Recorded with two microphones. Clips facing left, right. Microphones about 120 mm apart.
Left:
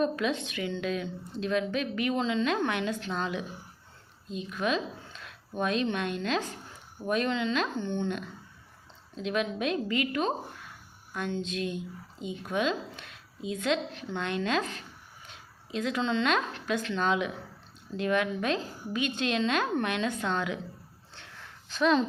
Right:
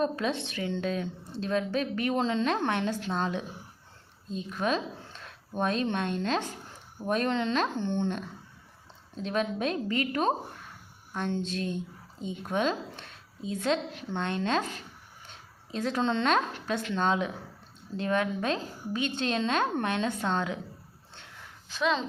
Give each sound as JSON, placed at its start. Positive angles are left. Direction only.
{"t": 0.0, "sound": "a woman's voice", "side_deg": -35}
{"t": 9.2, "sound": "a woman's voice", "side_deg": -35}
{"t": 21.7, "sound": "speech", "side_deg": 0}